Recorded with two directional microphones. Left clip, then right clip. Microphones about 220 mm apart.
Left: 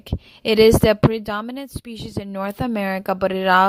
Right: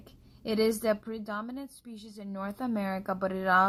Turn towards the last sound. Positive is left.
turn(degrees=45)  # may be behind; listen again after turning